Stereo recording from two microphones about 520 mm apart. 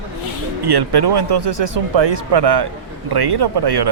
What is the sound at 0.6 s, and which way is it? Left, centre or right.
Speech, right.